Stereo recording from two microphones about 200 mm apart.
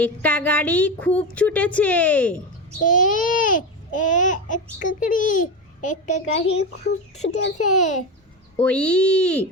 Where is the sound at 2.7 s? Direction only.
40° left (ahead or behind).